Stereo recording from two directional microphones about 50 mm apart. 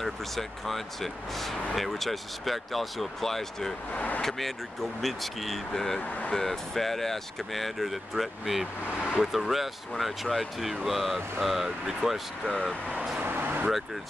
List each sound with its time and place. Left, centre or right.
0.0 s speech: centre
3.9 s speech: left
4.2 s speech: centre
13.2 s vehicle: right